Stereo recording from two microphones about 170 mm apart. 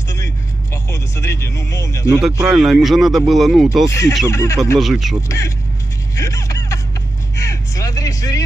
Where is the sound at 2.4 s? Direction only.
5° right (ahead or behind).